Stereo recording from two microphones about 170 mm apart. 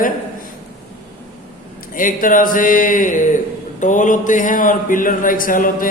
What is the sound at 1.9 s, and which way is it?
Speech, 50° left (ahead or behind).